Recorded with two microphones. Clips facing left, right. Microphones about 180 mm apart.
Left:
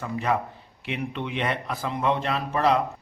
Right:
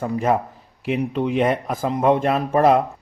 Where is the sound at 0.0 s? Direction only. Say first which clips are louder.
Right 6 dB; 45° right (ahead or behind).